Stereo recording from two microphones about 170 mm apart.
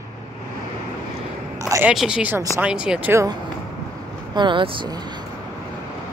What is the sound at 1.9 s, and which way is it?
Speech, 5° right (ahead or behind).